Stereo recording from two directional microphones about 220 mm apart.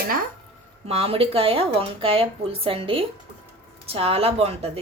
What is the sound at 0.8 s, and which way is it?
A woman's voice, 25° right (ahead or behind).